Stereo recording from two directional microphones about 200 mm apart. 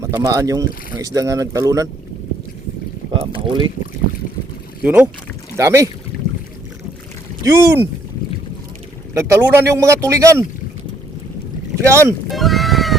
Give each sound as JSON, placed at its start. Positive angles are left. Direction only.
{"t": 0.0, "sound": "speech", "side_deg": -15}
{"t": 3.2, "sound": "speech", "side_deg": -25}
{"t": 4.8, "sound": "speech", "side_deg": -5}
{"t": 7.4, "sound": "speech", "side_deg": -15}
{"t": 9.1, "sound": "speech", "side_deg": -10}
{"t": 11.8, "sound": "speech", "side_deg": -15}
{"t": 12.3, "sound": "sheep", "side_deg": 0}